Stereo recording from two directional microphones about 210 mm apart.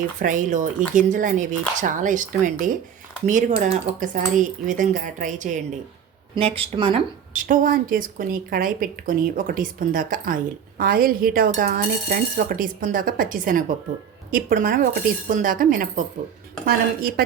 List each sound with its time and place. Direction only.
0.2 s a woman's voice: 40° right (ahead or behind)
6.3 s speech: 25° right (ahead or behind)
7.4 s a woman's voice: 40° right (ahead or behind)